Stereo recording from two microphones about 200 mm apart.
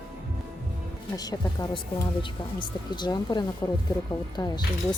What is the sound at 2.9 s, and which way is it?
Speech, 20° left (ahead or behind).